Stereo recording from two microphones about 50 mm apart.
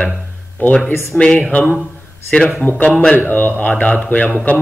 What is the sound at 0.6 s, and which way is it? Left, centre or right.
Speech, left.